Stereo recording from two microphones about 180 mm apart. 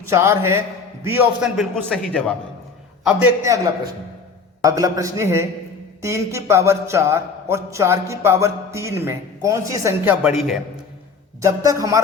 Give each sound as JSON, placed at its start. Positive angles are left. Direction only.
{"t": 0.0, "sound": "a man's voice", "side_deg": -15}
{"t": 4.6, "sound": "a man's voice", "side_deg": -20}
{"t": 11.3, "sound": "a man's voice", "side_deg": -20}